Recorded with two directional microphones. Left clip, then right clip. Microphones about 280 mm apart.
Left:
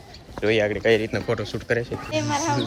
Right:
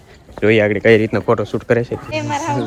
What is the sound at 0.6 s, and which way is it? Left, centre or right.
Speech, right.